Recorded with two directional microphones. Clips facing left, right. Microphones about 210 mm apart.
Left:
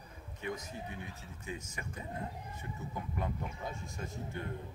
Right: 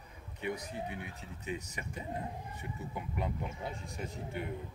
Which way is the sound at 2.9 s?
15° right (ahead or behind).